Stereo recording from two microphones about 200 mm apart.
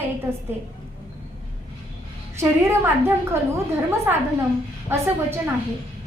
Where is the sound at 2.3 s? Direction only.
15° right (ahead or behind).